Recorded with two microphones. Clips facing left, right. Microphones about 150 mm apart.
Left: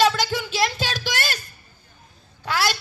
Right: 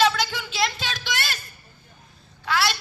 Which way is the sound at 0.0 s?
40° left (ahead or behind).